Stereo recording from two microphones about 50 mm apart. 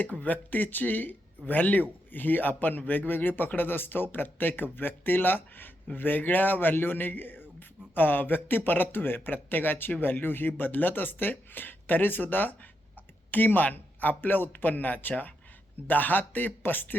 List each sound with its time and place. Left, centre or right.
0.0 s a man's voice: left